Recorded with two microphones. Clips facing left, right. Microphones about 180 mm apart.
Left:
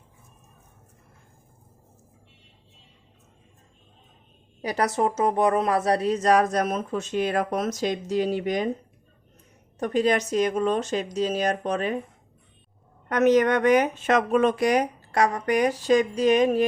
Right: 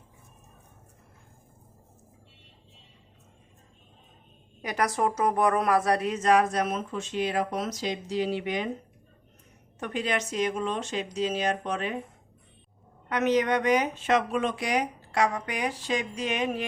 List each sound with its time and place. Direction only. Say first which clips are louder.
4.6 s speech: left 3 dB; 30° left (ahead or behind)
9.8 s speech: left 7 dB; 40° left (ahead or behind)
13.1 s speech: left 5 dB; 45° left (ahead or behind)